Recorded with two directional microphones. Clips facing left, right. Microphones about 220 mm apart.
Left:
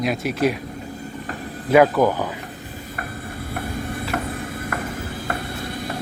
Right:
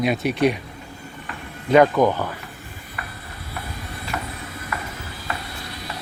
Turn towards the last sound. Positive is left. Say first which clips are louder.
# left 5 dB
turn(degrees=50)  # may be behind; listen again after turning